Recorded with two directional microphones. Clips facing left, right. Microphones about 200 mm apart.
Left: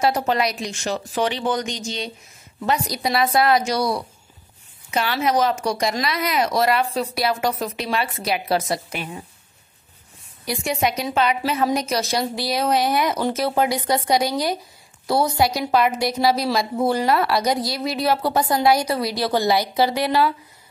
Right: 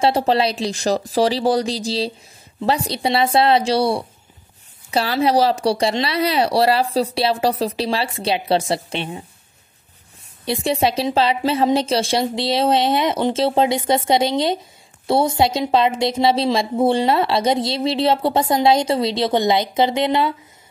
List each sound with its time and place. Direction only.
0.0 s a woman's voice: 30° right (ahead or behind)
10.4 s a woman's voice: 30° right (ahead or behind)